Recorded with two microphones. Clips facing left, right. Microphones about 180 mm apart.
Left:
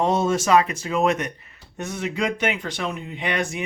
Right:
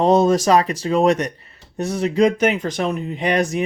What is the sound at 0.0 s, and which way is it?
Speech, 35° right (ahead or behind).